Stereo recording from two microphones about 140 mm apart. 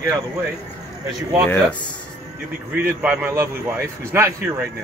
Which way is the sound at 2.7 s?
10° right (ahead or behind).